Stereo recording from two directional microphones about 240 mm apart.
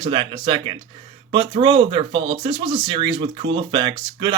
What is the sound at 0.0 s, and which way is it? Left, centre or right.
Speech, centre.